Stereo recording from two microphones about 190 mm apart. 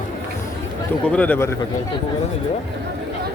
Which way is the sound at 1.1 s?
10° left (ahead or behind).